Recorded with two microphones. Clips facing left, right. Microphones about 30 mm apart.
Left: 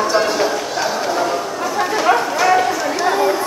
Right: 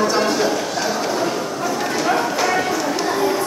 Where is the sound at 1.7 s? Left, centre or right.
Centre.